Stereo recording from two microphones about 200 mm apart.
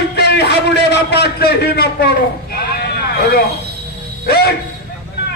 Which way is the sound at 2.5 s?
50° left (ahead or behind).